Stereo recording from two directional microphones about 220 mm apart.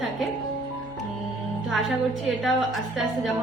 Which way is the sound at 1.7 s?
Centre (ahead or behind).